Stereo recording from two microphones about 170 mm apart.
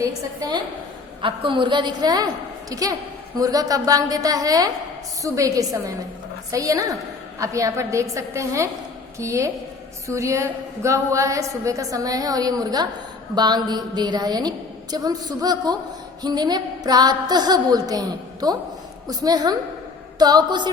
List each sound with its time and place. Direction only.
0.0 s a woman's voice: 25° right (ahead or behind)